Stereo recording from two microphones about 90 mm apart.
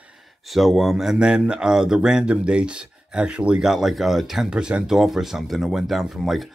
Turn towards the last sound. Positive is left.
turn(degrees=0)  # may be behind; listen again after turning